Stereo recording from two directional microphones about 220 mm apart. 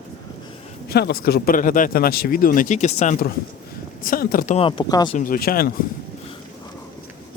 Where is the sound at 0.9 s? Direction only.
45° left (ahead or behind).